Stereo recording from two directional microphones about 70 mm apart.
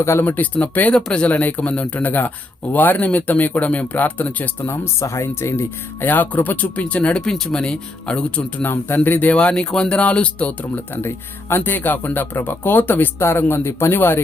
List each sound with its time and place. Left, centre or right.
0.0 s speech: left
0.3 s speech: left
4.6 s speech: left; by 8.6 s centre
8.6 s speech: left
9.3 s speech: centre; by 14.2 s left